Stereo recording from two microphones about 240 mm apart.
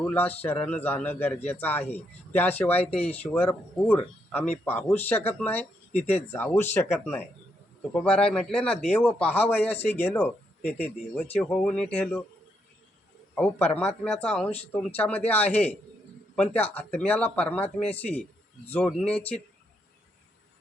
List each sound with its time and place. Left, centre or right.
0.0 s speech: centre
2.7 s speech: left
3.0 s speech: centre
7.9 s speech: centre
13.4 s speech: centre